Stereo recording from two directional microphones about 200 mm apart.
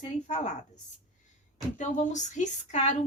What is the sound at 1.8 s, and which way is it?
Speech, 35° left (ahead or behind).